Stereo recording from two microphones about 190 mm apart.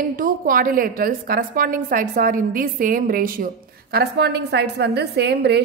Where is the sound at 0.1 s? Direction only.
50° right (ahead or behind).